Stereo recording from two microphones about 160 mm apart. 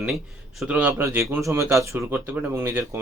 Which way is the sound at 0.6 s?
10° right (ahead or behind).